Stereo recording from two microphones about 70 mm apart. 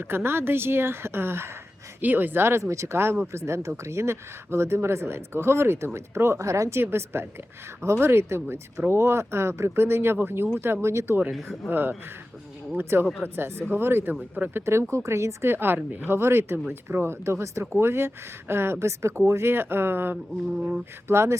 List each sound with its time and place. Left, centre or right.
0.0 s speech: right
14.6 s speech: right
20.6 s a sound: centre
21.1 s speech: right